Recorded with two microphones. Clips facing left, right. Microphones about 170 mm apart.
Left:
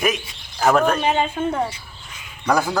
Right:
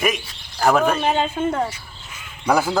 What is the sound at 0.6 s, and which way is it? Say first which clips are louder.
Speech: even; centre (ahead or behind).